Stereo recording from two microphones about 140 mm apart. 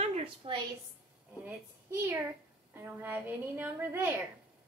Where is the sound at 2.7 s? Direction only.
15° right (ahead or behind).